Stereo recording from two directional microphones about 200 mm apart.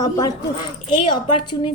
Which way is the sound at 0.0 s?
20° left (ahead or behind).